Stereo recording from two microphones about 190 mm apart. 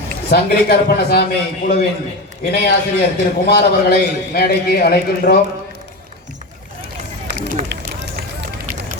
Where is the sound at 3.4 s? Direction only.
55° left (ahead or behind).